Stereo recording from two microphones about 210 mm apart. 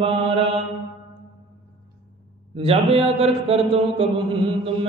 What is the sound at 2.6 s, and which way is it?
Mantra, 30° right (ahead or behind).